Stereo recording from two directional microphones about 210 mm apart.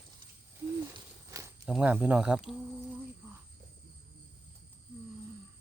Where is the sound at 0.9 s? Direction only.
15° right (ahead or behind).